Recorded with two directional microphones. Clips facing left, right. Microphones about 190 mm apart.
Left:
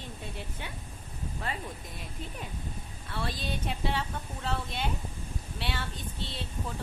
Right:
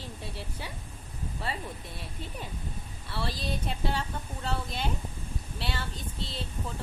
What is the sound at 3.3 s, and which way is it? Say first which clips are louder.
Speech: right 1 dB; 35° right (ahead or behind).